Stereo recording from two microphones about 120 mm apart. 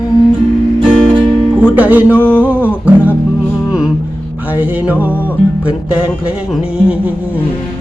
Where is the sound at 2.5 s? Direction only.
15° right (ahead or behind).